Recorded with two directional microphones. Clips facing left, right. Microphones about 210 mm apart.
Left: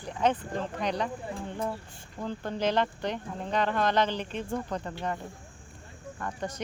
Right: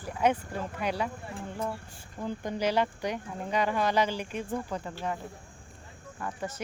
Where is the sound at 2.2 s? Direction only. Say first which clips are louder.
Even; 10° right (ahead or behind).